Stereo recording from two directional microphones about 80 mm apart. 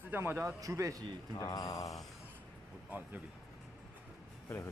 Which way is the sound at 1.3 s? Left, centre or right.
Left.